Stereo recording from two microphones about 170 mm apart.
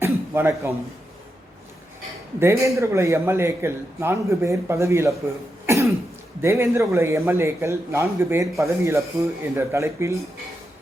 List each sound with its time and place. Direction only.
0.0 s throat clearing: 15° right (ahead or behind)
2.4 s a man's voice: 15° right (ahead or behind)
5.6 s cough: 15° right (ahead or behind)
6.4 s a man's voice: 15° right (ahead or behind)